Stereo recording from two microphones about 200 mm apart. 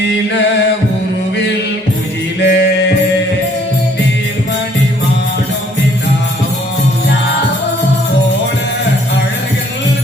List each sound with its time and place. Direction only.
2.4 s music: 60° left (ahead or behind)